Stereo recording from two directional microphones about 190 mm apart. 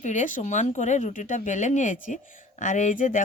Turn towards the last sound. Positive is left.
turn(degrees=40)  # may be behind; listen again after turning